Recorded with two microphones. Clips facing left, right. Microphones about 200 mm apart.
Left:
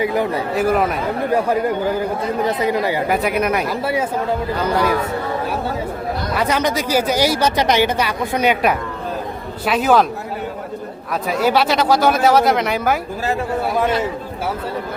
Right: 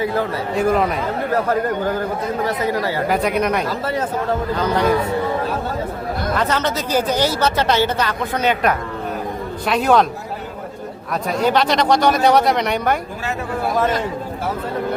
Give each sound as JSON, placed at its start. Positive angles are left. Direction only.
{"t": 0.0, "sound": "speech", "side_deg": 15}
{"t": 0.5, "sound": "speech", "side_deg": 5}
{"t": 3.1, "sound": "speech", "side_deg": 5}
{"t": 6.3, "sound": "speech", "side_deg": 10}
{"t": 11.1, "sound": "speech", "side_deg": 5}